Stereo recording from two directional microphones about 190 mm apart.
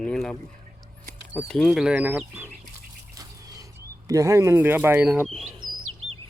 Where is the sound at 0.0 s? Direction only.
5° left (ahead or behind).